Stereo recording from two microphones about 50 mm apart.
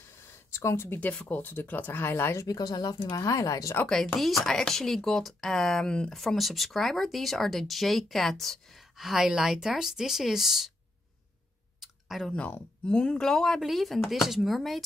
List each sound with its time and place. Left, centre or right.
0.5 s speech: left
1.4 s speech: left
3.2 s speech: left
3.8 s speech: centre
4.2 s speech: centre
6.1 s speech: centre
8.9 s speech: centre
11.8 s a sound: centre
12.3 s speech: left; by 13.6 s centre
13.6 s speech: centre